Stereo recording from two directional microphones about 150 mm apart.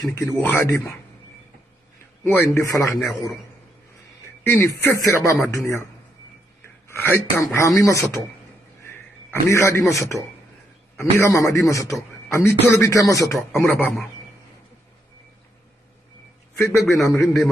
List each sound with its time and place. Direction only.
0.0 s speech: 20° left (ahead or behind)
2.2 s speech: 15° left (ahead or behind)
3.0 s a man's voice: centre (ahead or behind)
4.5 s a man's voice: 15° left (ahead or behind)
7.3 s a man's voice: 20° left (ahead or behind)
16.5 s a man's voice: 15° left (ahead or behind)